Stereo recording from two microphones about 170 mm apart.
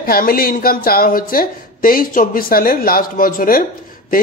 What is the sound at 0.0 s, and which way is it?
A man's voice, 60° left (ahead or behind).